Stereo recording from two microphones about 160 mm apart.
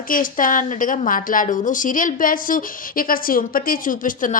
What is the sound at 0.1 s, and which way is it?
A woman's voice, 60° left (ahead or behind).